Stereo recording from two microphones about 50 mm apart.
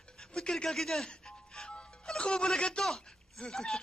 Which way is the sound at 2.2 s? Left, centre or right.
Centre.